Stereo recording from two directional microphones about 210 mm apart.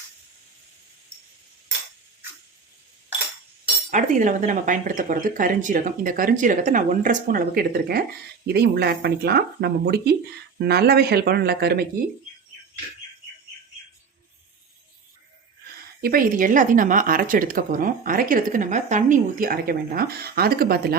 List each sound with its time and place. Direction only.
3.9 s speech: 35° right (ahead or behind)
16.0 s speech: 45° right (ahead or behind)